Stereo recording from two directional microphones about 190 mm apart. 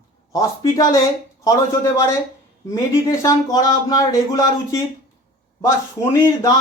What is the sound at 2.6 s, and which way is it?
Speech, 15° left (ahead or behind).